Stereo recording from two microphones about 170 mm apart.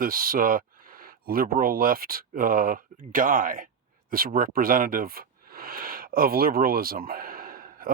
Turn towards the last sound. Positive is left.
turn(degrees=-55)  # may be behind; listen again after turning